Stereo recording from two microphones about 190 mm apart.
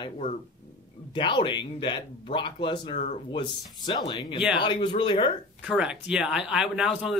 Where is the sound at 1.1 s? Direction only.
25° left (ahead or behind).